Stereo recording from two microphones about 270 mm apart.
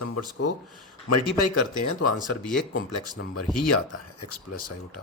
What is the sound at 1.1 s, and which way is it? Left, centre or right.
Speech, left.